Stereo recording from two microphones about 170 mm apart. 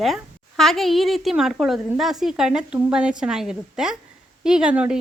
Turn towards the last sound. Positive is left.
turn(degrees=-5)  # may be behind; listen again after turning